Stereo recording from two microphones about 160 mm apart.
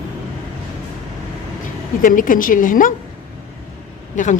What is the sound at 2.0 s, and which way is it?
Speech, 60° left (ahead or behind).